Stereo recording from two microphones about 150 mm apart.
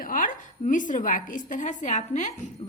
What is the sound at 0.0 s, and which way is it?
A woman's voice, 65° left (ahead or behind).